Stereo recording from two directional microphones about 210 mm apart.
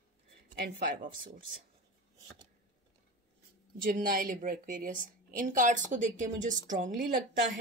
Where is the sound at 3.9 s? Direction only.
40° right (ahead or behind).